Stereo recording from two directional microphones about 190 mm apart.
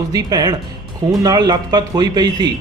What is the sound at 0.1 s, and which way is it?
Speech, 20° right (ahead or behind).